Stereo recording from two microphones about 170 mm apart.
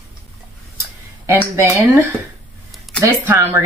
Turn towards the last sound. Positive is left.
turn(degrees=-15)  # may be behind; listen again after turning